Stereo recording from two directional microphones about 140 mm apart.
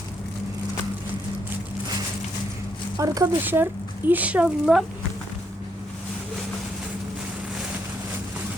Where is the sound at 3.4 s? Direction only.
15° right (ahead or behind).